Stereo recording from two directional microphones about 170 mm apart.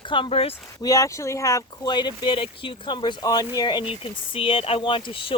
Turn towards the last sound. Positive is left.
turn(degrees=30)  # may be behind; listen again after turning